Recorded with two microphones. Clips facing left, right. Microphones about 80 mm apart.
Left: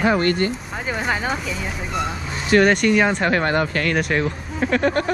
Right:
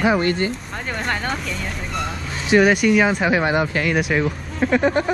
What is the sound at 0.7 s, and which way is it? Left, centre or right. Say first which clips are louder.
Speech: left 1 dB; centre.